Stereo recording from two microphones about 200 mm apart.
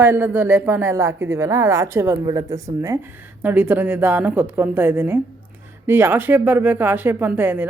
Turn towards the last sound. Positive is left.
turn(degrees=-10)  # may be behind; listen again after turning